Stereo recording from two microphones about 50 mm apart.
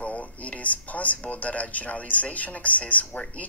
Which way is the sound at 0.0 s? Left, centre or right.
Left.